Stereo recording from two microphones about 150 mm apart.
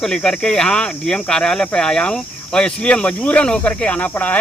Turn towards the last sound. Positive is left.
turn(degrees=10)  # may be behind; listen again after turning